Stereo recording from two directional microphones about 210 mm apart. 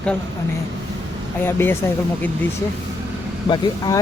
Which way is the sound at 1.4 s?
10° left (ahead or behind).